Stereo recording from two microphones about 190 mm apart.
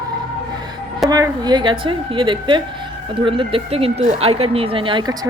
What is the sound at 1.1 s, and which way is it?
A woman's voice, 20° right (ahead or behind).